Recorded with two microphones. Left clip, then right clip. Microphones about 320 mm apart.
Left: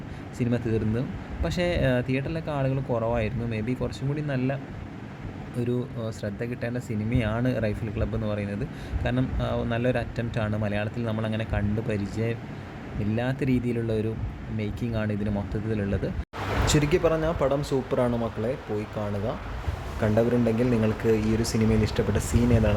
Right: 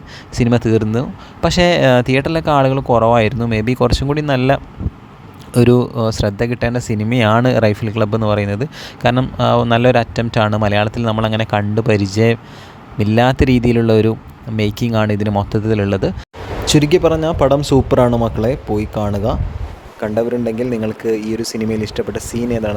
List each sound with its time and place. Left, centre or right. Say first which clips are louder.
0.3 s speech: right 13 dB; right